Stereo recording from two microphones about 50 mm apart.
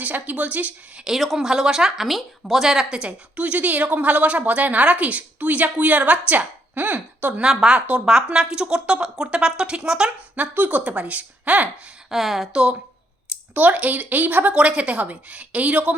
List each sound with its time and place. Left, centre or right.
0.0 s speech: right
1.0 s speech: centre
3.0 s a woman's voice: right
7.4 s speech: centre
10.3 s a woman's voice: right
12.1 s speech: centre
13.5 s a woman's voice: right